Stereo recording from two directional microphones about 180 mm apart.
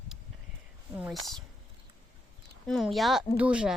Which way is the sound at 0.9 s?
5° right (ahead or behind).